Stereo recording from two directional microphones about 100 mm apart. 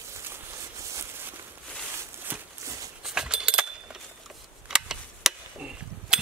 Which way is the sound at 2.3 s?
20° right (ahead or behind).